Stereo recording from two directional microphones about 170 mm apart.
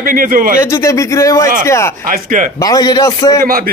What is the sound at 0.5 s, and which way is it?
Speech, 15° left (ahead or behind).